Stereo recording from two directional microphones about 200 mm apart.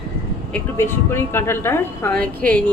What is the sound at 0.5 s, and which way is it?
Speech, 10° left (ahead or behind).